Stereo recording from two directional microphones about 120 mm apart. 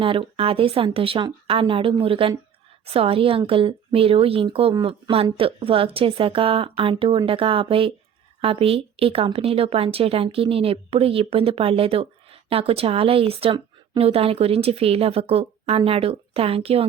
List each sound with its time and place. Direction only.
0.0 s a woman's voice: 50° right (ahead or behind)